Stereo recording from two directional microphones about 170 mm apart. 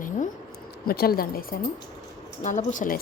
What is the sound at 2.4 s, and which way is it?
Speech, 45° left (ahead or behind).